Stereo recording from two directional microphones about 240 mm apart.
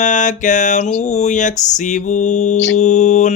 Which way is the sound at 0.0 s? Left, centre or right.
Left.